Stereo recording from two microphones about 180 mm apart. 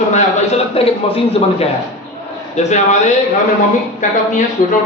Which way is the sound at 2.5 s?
40° left (ahead or behind).